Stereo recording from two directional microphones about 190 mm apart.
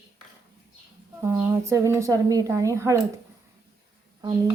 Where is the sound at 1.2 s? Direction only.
15° right (ahead or behind).